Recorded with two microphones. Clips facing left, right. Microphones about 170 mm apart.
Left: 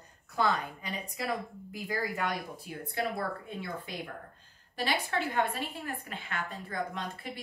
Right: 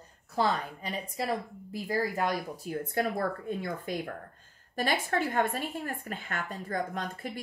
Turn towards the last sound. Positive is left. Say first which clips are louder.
# right 2 dB
turn(degrees=-45)  # may be behind; listen again after turning